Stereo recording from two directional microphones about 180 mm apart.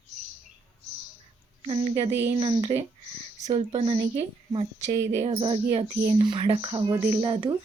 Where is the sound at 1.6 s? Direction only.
35° right (ahead or behind).